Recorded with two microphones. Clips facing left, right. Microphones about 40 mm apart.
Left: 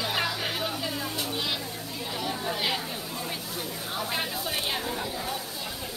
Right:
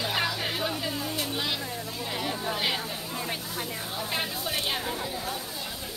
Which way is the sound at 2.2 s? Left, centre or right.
Centre.